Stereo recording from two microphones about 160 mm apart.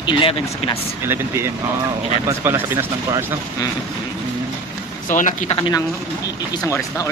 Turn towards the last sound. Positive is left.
turn(degrees=20)  # may be behind; listen again after turning